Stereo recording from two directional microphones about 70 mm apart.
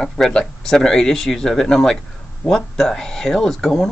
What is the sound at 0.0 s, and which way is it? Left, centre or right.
Speech, centre.